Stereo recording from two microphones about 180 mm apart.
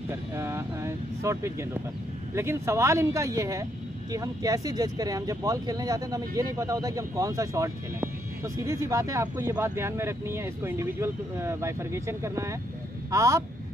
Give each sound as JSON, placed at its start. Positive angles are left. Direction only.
{"t": 0.1, "sound": "speech", "side_deg": -15}